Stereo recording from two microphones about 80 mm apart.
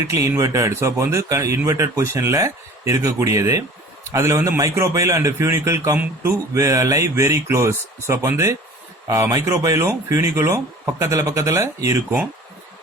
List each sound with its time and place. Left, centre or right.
0.1 s speech: right